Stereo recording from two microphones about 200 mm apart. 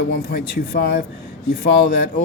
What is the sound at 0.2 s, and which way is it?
Speech, 50° left (ahead or behind).